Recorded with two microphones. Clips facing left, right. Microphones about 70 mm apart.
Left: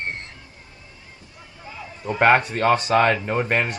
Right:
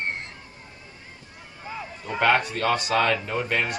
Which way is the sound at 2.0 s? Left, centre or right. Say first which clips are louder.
Left 5 dB; left.